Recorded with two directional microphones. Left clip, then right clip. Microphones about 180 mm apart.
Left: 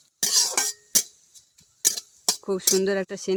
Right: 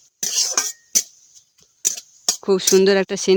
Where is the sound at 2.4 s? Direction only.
50° right (ahead or behind).